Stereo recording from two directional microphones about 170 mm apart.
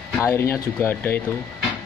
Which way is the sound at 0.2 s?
15° left (ahead or behind).